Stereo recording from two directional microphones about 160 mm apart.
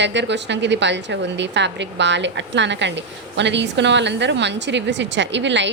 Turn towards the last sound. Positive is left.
turn(degrees=-90)